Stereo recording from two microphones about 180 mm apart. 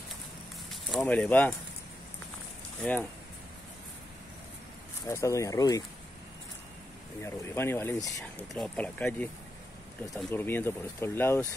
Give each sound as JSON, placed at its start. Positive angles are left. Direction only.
{"t": 0.7, "sound": "speech", "side_deg": 0}
{"t": 2.8, "sound": "speech", "side_deg": 10}
{"t": 5.0, "sound": "speech", "side_deg": 15}
{"t": 7.2, "sound": "speech", "side_deg": 15}
{"t": 10.3, "sound": "speech", "side_deg": 10}